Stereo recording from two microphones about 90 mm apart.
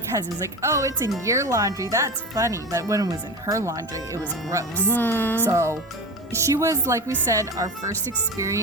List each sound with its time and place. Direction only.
0.1 s speech: 35° right (ahead or behind)
4.8 s music: 20° left (ahead or behind)
5.5 s speech: 30° right (ahead or behind)